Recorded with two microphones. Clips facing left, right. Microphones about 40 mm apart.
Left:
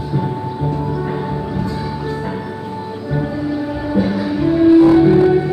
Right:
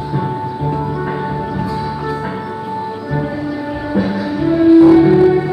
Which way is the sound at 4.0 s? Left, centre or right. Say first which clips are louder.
Even; centre.